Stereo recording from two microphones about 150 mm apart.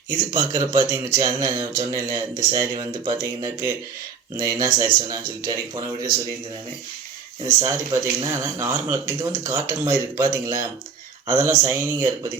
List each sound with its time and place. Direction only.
0.2 s speech: 25° right (ahead or behind)
7.4 s speech: 20° right (ahead or behind)